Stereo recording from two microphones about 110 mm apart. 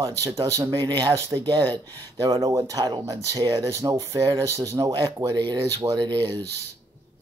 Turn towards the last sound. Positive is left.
turn(degrees=-45)  # may be behind; listen again after turning